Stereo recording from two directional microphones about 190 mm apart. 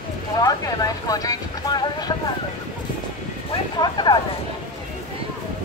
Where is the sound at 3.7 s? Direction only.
25° left (ahead or behind).